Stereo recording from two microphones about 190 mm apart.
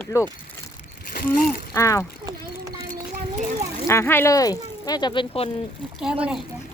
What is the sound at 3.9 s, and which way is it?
Speech, 15° left (ahead or behind).